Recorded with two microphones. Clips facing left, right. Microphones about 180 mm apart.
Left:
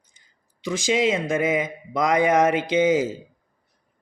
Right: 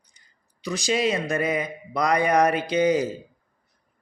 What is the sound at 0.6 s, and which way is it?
Speech, 90° left.